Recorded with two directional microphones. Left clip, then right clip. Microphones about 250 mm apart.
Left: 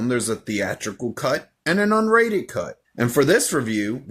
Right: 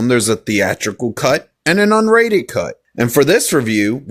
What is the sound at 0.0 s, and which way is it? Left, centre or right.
Speech, right.